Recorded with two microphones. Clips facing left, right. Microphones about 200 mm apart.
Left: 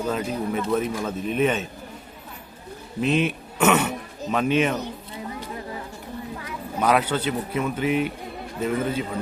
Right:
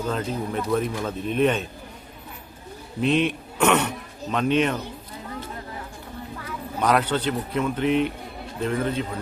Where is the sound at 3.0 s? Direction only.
5° left (ahead or behind).